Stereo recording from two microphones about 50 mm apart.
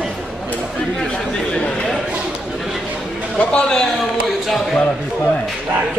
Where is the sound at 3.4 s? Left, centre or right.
Left.